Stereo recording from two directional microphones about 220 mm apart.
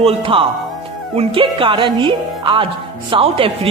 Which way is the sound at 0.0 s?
25° right (ahead or behind).